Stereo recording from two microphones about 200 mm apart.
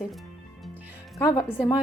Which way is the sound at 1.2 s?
15° left (ahead or behind).